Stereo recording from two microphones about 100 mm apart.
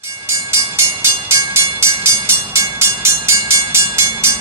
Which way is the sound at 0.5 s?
25° right (ahead or behind).